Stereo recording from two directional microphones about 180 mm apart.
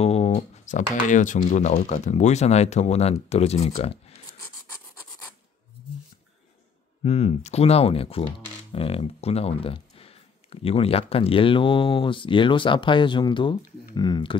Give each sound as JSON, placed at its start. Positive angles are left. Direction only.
{"t": 0.0, "sound": "speech", "side_deg": 35}
{"t": 7.0, "sound": "speech", "side_deg": 35}